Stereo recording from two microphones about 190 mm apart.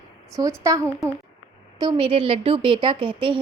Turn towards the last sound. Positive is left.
turn(degrees=-25)  # may be behind; listen again after turning